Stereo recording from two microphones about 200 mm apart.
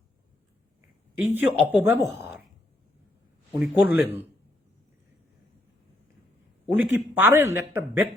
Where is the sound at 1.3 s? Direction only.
10° right (ahead or behind).